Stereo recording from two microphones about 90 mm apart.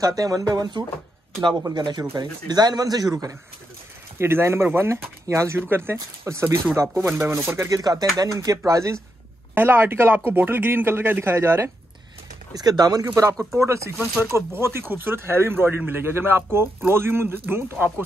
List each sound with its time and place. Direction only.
0.0 s a man's voice: 40° right (ahead or behind)
4.2 s a man's voice: 25° right (ahead or behind)
7.8 s a man's voice: 45° right (ahead or behind)
9.6 s a man's voice: 25° right (ahead or behind)
12.5 s a man's voice: 45° right (ahead or behind); by 18.0 s 20° right (ahead or behind)